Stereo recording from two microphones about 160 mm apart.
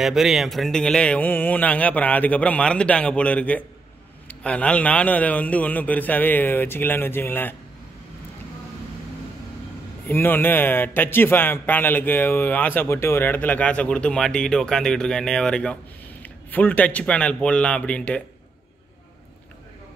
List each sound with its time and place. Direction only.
0.0 s a man's voice: centre (ahead or behind)
10.0 s a man's voice: 10° left (ahead or behind)